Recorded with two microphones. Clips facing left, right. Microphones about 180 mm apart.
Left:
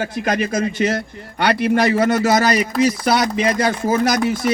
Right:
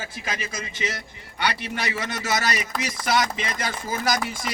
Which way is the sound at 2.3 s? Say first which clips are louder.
Left 10 dB; 45° left (ahead or behind).